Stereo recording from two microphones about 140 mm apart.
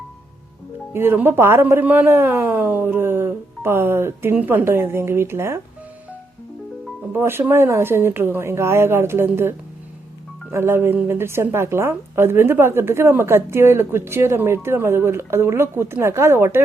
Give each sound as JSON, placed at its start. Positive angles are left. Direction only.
{"t": 0.9, "sound": "a woman's voice", "side_deg": -15}
{"t": 7.1, "sound": "a woman's voice", "side_deg": -15}